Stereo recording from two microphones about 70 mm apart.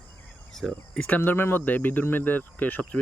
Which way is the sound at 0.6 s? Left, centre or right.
Centre.